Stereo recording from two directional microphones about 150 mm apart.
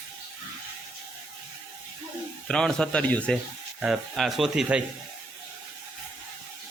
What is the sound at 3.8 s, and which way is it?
Speech, centre (ahead or behind).